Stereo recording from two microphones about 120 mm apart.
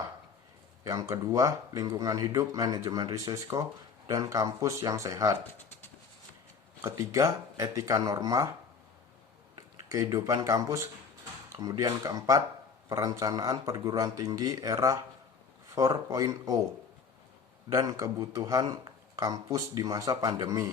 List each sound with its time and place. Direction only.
0.9 s speech: 25° right (ahead or behind)
6.8 s speech: 25° right (ahead or behind)
9.6 s speech: 30° right (ahead or behind)
17.7 s speech: 30° right (ahead or behind)